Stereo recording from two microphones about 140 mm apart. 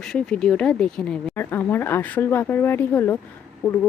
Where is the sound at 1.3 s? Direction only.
15° left (ahead or behind).